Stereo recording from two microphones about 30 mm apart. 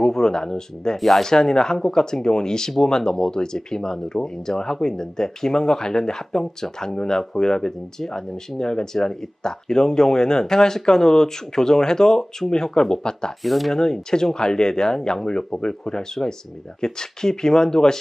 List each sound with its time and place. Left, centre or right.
0.0 s speech: centre
0.9 s speech: centre
1.2 s speech: left
13.4 s speech: centre
13.7 s speech: left